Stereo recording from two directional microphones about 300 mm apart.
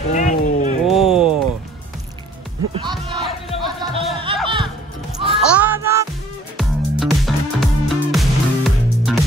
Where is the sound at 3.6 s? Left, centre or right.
Centre.